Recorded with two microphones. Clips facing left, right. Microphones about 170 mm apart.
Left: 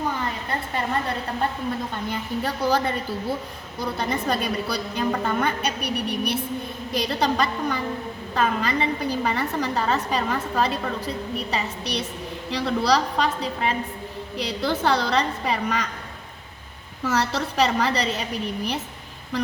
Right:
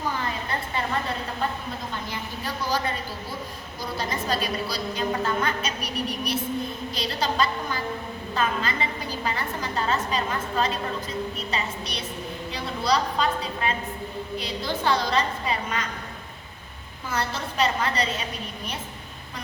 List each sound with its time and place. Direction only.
2.0 s a woman's voice: 60° left (ahead or behind)
14.3 s a woman's voice: 65° left (ahead or behind)
17.0 s a woman's voice: 75° left (ahead or behind)